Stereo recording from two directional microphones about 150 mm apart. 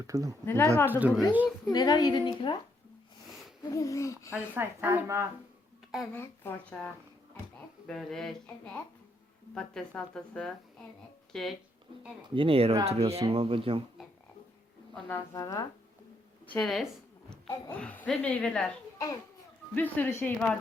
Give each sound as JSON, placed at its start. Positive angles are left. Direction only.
{"t": 0.1, "sound": "speech", "side_deg": -25}
{"t": 0.4, "sound": "a woman's voice", "side_deg": 15}
{"t": 0.9, "sound": "a woman's voice", "side_deg": -10}
{"t": 1.7, "sound": "a woman's voice", "side_deg": 30}
{"t": 3.6, "sound": "a woman's voice", "side_deg": 20}
{"t": 4.5, "sound": "a woman's voice", "side_deg": -15}
{"t": 6.1, "sound": "a woman's voice", "side_deg": 10}
{"t": 12.3, "sound": "speech", "side_deg": -35}
{"t": 14.9, "sound": "a woman's voice", "side_deg": 10}
{"t": 15.3, "sound": "a woman's voice", "side_deg": 20}
{"t": 16.5, "sound": "a woman's voice", "side_deg": 5}
{"t": 18.9, "sound": "a child's voice", "side_deg": 25}
{"t": 19.7, "sound": "a woman's voice", "side_deg": 10}